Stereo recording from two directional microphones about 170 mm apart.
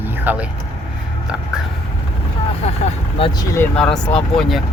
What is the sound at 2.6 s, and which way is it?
Speech, 40° left (ahead or behind).